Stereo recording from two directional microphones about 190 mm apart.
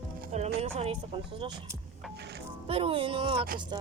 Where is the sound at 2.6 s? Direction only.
30° right (ahead or behind).